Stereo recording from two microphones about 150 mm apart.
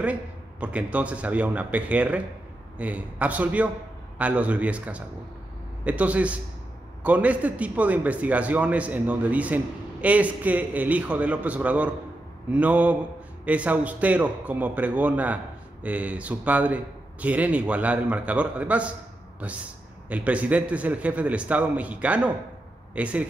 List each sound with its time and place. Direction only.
0.0 s a man's voice: 10° right (ahead or behind)